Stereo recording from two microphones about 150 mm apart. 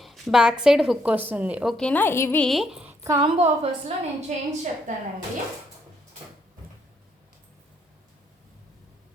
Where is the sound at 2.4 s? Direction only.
Centre (ahead or behind).